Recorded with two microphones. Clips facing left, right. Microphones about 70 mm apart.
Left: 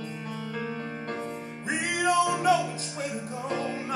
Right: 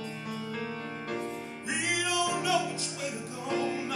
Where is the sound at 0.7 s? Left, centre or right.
Left.